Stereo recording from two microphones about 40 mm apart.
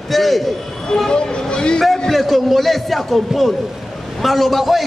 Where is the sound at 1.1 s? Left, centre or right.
Centre.